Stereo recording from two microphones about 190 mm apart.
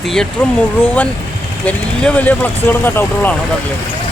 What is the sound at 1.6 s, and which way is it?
Speech, 5° left (ahead or behind).